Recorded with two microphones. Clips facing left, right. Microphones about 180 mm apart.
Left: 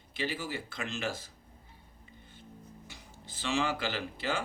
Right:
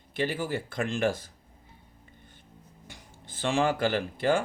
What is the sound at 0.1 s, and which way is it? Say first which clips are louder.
Speech: right 6 dB; 50° right (ahead or behind).